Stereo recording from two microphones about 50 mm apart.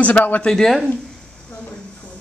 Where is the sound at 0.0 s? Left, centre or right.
Left.